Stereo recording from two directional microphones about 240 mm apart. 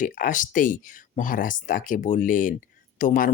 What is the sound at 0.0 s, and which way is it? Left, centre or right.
Speech, left.